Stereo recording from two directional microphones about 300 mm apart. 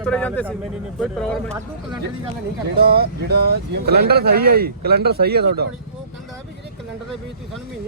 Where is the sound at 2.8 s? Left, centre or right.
Right.